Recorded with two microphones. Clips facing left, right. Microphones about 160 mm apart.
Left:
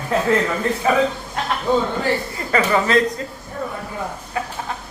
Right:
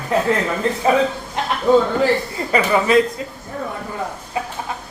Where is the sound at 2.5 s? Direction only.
15° right (ahead or behind).